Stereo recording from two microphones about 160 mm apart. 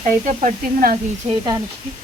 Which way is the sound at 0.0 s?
50° right (ahead or behind).